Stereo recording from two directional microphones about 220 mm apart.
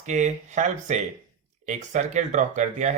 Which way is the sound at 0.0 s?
30° right (ahead or behind).